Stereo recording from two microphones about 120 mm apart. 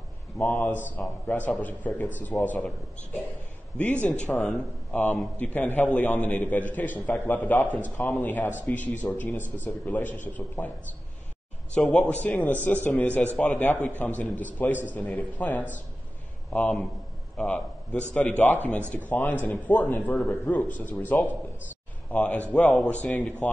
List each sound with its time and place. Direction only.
0.4 s a man's voice: 15° left (ahead or behind)
11.7 s a man's voice: 10° left (ahead or behind)